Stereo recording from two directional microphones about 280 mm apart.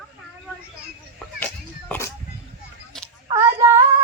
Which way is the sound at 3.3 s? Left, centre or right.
Centre.